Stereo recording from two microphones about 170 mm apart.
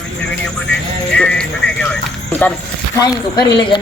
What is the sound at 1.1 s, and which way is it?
Speech, 5° left (ahead or behind).